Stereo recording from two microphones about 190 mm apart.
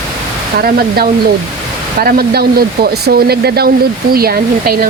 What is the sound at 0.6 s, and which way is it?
Speech, 55° right (ahead or behind).